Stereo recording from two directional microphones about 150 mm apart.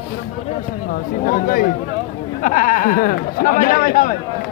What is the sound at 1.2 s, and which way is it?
Speech, 70° left (ahead or behind).